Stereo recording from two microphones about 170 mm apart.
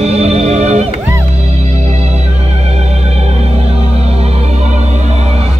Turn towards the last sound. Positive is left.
turn(degrees=-40)  # may be behind; listen again after turning